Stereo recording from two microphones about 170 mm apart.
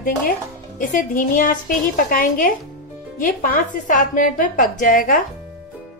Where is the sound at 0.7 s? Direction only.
50° left (ahead or behind).